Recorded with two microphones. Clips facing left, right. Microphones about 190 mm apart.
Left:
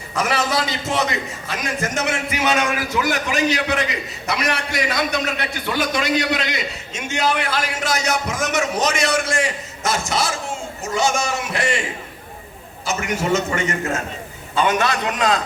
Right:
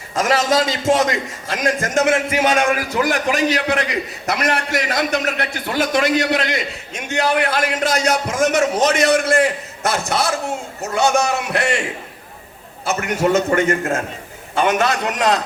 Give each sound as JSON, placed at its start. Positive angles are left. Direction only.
{"t": 0.1, "sound": "a man's voice", "side_deg": -45}